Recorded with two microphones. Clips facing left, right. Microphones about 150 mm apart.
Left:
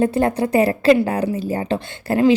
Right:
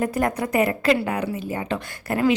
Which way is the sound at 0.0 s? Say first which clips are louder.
Left 5 dB; 30° left (ahead or behind).